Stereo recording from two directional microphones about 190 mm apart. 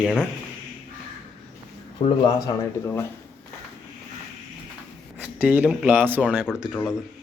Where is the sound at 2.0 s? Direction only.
30° left (ahead or behind).